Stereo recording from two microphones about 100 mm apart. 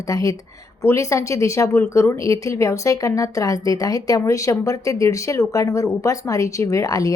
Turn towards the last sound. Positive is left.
turn(degrees=35)  # may be behind; listen again after turning